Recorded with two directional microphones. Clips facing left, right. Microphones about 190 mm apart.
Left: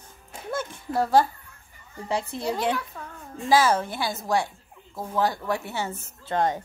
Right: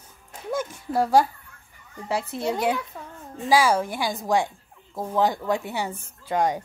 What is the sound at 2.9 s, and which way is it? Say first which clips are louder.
Child singing: even; 30° right (ahead or behind).